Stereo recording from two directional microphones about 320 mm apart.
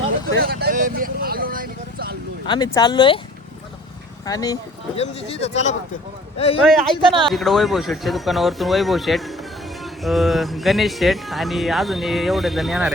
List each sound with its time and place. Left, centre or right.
0.3 s vehicle: right
2.5 s speech: centre
4.3 s speech: centre
6.7 s speech: centre